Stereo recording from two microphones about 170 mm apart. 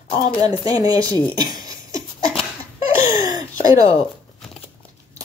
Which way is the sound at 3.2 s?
20° right (ahead or behind).